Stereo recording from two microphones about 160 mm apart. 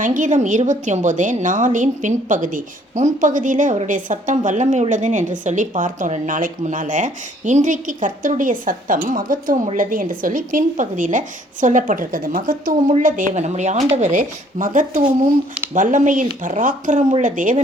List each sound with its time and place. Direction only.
0.0 s a woman's voice: 55° right (ahead or behind)
13.3 s a woman's voice: 45° right (ahead or behind)